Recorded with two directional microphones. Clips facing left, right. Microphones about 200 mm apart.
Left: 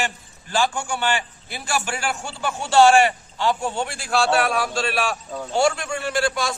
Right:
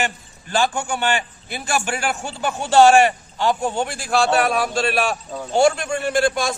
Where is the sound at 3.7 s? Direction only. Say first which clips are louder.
Right 3 dB; 20° right (ahead or behind).